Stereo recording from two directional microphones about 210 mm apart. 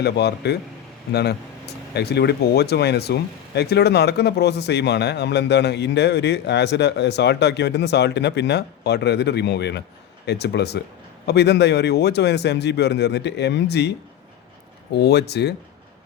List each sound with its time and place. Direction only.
0.0 s speech: 50° left (ahead or behind)
14.9 s speech: 50° left (ahead or behind)